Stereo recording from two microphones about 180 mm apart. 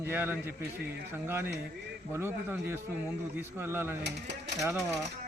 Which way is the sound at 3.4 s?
15° right (ahead or behind).